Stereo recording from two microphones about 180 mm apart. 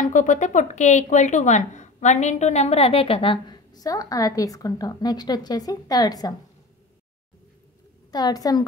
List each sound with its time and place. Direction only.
0.0 s speech: 45° left (ahead or behind); by 6.3 s 20° left (ahead or behind)
8.1 s a woman's voice: 20° left (ahead or behind)